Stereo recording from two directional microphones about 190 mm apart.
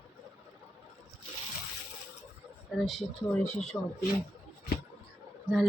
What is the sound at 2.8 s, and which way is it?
Speech, centre (ahead or behind).